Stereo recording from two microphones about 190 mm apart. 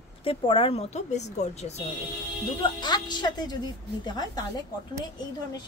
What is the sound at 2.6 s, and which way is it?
A woman's voice, 25° left (ahead or behind).